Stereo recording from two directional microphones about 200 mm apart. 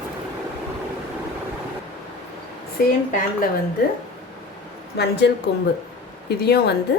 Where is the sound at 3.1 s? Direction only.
40° left (ahead or behind).